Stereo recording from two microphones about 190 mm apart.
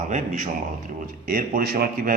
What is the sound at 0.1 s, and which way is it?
A man's voice, 40° right (ahead or behind).